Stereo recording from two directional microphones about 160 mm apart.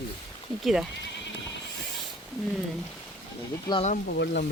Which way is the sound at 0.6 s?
Centre (ahead or behind).